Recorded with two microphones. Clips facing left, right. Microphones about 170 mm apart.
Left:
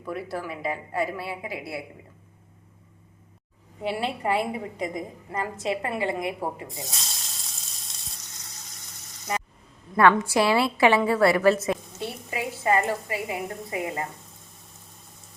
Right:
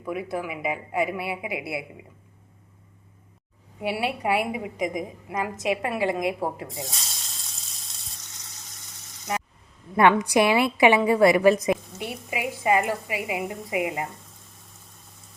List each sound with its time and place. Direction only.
0.0 s a woman's voice: 15° right (ahead or behind)
3.8 s a woman's voice: 10° right (ahead or behind)
6.7 s speech: centre (ahead or behind)
9.9 s a woman's voice: 15° right (ahead or behind)